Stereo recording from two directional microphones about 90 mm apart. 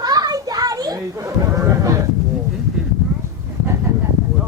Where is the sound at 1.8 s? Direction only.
40° right (ahead or behind).